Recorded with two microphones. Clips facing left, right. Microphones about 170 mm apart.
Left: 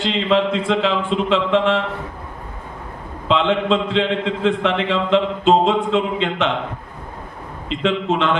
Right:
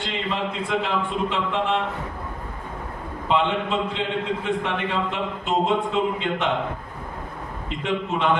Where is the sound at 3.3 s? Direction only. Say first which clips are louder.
Left 5 dB; 90° left.